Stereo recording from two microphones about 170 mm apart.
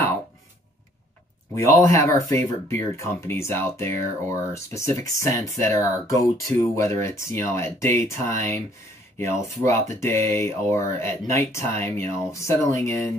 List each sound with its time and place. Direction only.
1.5 s speech: 15° left (ahead or behind)
9.7 s speech: 15° left (ahead or behind)